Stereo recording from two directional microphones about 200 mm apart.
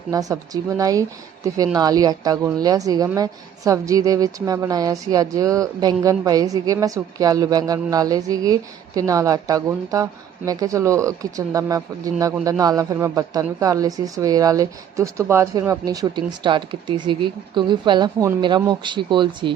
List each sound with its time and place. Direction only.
0.1 s a woman's voice: 20° right (ahead or behind)